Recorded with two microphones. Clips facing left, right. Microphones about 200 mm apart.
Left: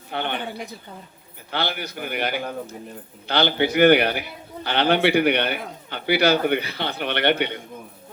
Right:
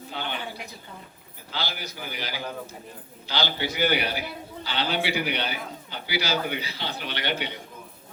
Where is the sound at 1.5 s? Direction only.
60° left (ahead or behind).